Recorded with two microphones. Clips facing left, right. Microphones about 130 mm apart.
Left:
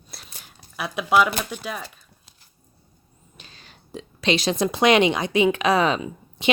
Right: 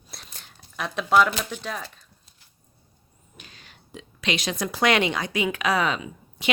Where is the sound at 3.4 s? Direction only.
30° left (ahead or behind).